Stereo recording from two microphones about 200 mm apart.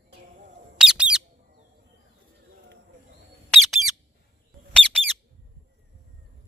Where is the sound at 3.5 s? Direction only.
Centre (ahead or behind).